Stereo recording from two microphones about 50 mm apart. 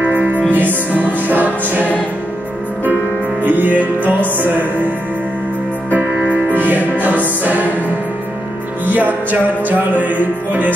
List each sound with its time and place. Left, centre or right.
0.0 s music: right
3.4 s music: right
8.8 s music: right